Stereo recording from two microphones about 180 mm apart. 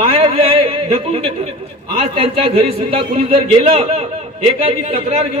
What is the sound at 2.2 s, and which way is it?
Speech, 35° right (ahead or behind).